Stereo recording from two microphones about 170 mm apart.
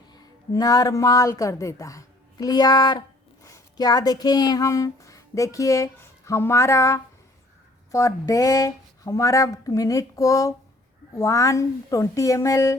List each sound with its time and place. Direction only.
0.1 s a woman's voice: 25° left (ahead or behind)